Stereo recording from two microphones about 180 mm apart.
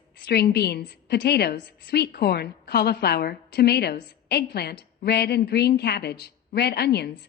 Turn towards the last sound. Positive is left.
turn(degrees=65)  # may be behind; listen again after turning